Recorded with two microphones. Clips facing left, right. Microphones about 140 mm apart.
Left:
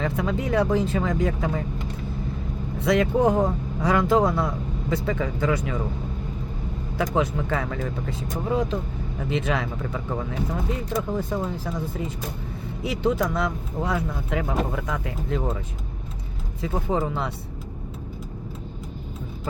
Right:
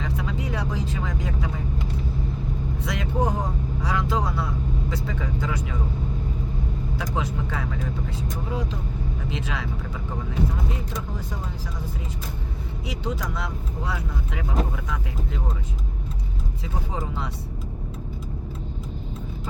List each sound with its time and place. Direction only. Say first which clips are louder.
0.0 s speech: left 4 dB; 55° left (ahead or behind)
2.8 s speech: left 8 dB; 60° left (ahead or behind)
4.9 s speech: left 4 dB; 60° left (ahead or behind)
7.0 s speech: left 7 dB; 55° left (ahead or behind)
11.2 s speech: left 7 dB; 55° left (ahead or behind)
12.8 s speech: left 8 dB; 55° left (ahead or behind)
16.6 s speech: left 8 dB; 60° left (ahead or behind)